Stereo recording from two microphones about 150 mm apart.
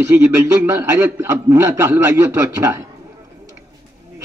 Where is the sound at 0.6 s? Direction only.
15° right (ahead or behind).